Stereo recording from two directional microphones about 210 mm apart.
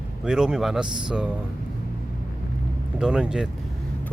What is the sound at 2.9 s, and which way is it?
Speech, 5° right (ahead or behind).